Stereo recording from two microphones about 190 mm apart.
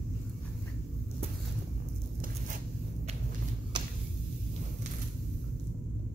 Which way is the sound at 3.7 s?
25° right (ahead or behind).